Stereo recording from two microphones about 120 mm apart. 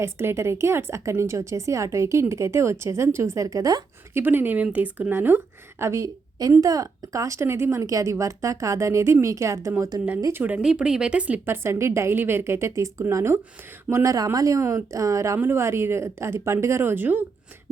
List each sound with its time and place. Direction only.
0.0 s a woman's voice: 20° right (ahead or behind)
4.1 s a woman's voice: 15° right (ahead or behind)
10.4 s a woman's voice: 10° right (ahead or behind)